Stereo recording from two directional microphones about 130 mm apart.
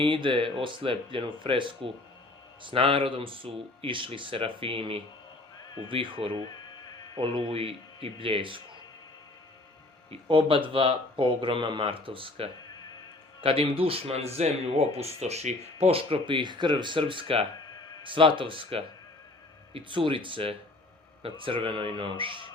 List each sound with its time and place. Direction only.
0.0 s speech: 40° right (ahead or behind)
10.1 s speech: 45° right (ahead or behind)